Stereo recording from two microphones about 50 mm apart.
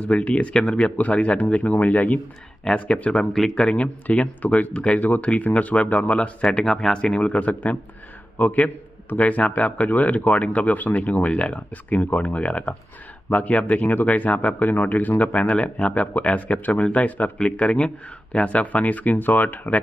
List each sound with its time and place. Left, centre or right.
0.2 s speech: left
2.6 s a man's voice: centre; by 19.8 s left